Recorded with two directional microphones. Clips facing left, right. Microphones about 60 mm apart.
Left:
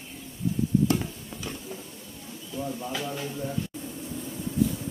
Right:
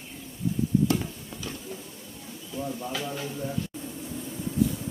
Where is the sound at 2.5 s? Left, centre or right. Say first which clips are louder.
Even; right.